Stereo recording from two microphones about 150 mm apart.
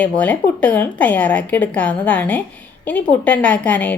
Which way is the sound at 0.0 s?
10° left (ahead or behind).